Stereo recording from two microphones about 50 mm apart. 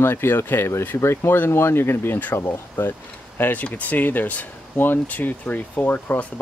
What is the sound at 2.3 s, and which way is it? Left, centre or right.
Speech, left.